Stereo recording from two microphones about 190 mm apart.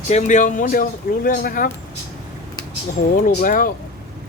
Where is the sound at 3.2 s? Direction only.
45° left (ahead or behind).